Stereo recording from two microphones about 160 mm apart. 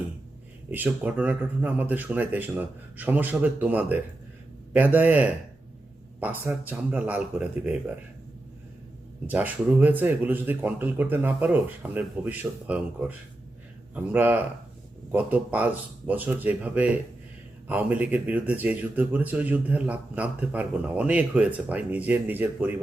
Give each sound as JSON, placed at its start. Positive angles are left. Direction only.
{"t": 0.7, "sound": "speech", "side_deg": -10}
{"t": 9.2, "sound": "speech", "side_deg": -10}